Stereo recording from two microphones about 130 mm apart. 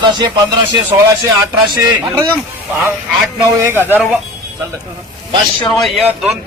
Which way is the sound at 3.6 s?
20° right (ahead or behind).